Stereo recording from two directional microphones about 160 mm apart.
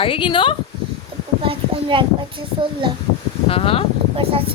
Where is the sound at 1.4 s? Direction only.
30° right (ahead or behind).